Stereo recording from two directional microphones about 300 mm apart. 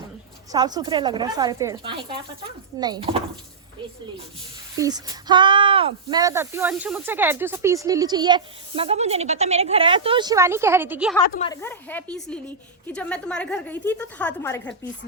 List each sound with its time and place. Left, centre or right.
0.5 s speech: centre
4.8 s speech: centre
11.4 s a woman's voice: centre